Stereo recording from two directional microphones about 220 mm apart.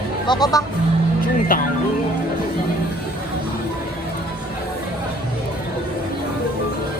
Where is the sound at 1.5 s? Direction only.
40° left (ahead or behind).